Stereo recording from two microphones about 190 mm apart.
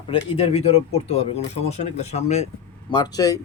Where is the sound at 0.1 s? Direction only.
30° left (ahead or behind).